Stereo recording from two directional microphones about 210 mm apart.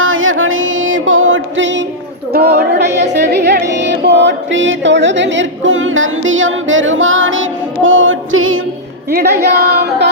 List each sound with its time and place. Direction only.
0.0 s music: 70° right (ahead or behind)
2.3 s music: 50° right (ahead or behind); by 8.6 s 70° right (ahead or behind)
9.1 s music: 50° right (ahead or behind)